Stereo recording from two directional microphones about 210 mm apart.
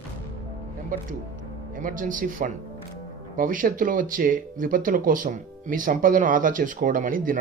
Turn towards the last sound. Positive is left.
turn(degrees=-40)  # may be behind; listen again after turning